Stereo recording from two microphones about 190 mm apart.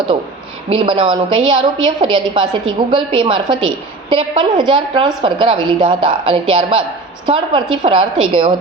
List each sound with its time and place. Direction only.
0.7 s a woman's voice: 25° right (ahead or behind)